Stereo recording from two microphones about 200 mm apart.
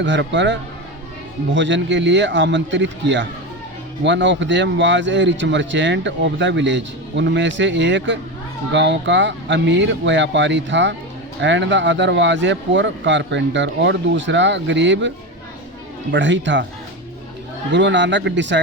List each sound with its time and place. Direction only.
0.0 s speech: 65° right (ahead or behind)
16.1 s speech: 65° right (ahead or behind)
17.7 s speech: 60° right (ahead or behind)